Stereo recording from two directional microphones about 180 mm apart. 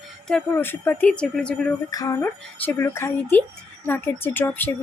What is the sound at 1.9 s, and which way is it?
Speech, 15° left (ahead or behind).